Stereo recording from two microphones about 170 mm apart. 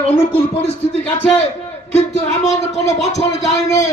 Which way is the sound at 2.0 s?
40° left (ahead or behind).